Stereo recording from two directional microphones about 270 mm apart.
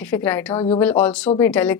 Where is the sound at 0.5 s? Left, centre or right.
Left.